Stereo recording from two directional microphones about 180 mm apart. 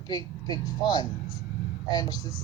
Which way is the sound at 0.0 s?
25° left (ahead or behind).